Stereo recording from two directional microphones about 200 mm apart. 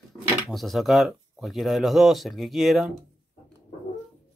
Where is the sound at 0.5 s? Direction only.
Centre (ahead or behind).